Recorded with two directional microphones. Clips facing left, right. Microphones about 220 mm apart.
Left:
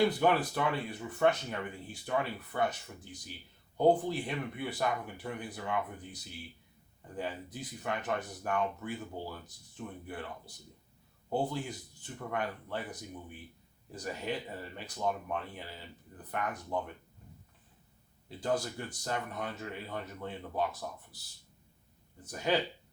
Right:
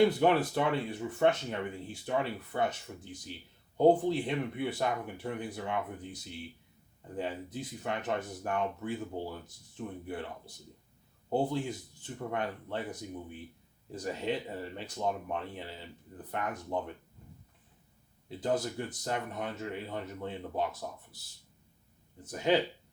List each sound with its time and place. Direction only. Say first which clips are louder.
0.0 s speech: right 3 dB; 25° right (ahead or behind)
18.3 s speech: right 2 dB; 20° right (ahead or behind)
22.2 s speech: right 3 dB; 20° right (ahead or behind)